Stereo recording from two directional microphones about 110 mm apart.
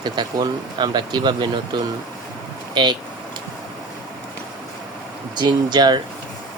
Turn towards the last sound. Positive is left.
turn(degrees=-40)  # may be behind; listen again after turning